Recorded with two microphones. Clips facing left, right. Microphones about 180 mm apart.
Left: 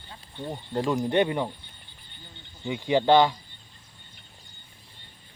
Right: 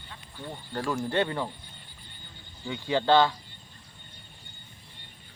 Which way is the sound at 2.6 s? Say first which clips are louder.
Left 4 dB; 15° left (ahead or behind).